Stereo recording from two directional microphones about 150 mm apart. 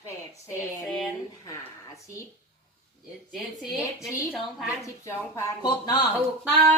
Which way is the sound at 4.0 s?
Centre (ahead or behind).